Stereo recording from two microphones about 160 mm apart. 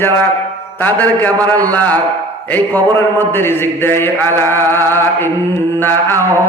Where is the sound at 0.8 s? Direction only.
10° left (ahead or behind).